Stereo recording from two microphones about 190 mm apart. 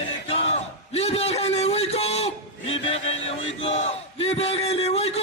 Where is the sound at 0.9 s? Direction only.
30° left (ahead or behind).